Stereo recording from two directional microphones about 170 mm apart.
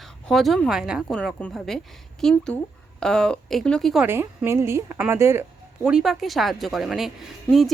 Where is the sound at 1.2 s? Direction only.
5° left (ahead or behind).